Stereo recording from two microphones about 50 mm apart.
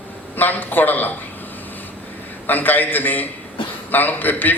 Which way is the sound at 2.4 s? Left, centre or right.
Left.